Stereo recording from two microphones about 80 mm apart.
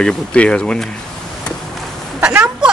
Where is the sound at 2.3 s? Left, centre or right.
Centre.